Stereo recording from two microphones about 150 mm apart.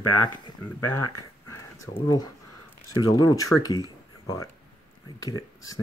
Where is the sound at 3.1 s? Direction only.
20° left (ahead or behind).